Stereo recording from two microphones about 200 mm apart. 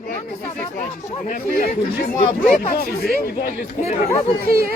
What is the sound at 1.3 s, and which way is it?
Speech, 45° left (ahead or behind).